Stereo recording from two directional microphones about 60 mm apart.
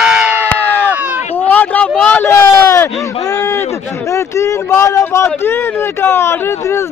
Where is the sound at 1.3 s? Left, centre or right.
Left.